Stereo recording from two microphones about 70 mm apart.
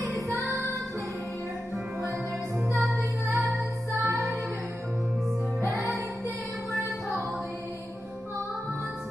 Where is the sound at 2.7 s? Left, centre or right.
Centre.